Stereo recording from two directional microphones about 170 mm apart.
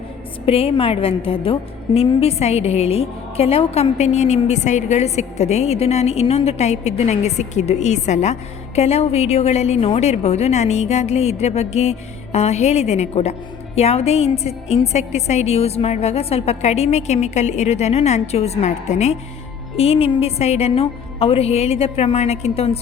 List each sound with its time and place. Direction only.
0.4 s a woman's voice: 35° left (ahead or behind)